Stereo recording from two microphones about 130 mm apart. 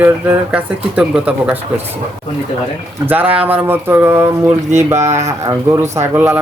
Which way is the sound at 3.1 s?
10° right (ahead or behind).